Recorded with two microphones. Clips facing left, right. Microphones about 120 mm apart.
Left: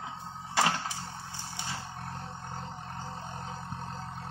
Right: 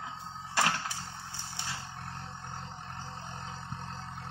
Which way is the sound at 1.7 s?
45° left (ahead or behind).